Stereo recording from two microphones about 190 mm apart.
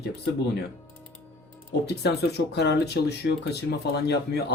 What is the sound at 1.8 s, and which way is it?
Speech, 60° left (ahead or behind).